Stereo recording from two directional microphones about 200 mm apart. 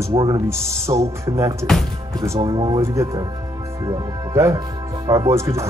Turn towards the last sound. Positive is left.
turn(degrees=-15)  # may be behind; listen again after turning